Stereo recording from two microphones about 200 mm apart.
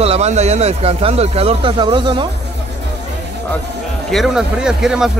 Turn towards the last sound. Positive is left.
turn(degrees=-5)  # may be behind; listen again after turning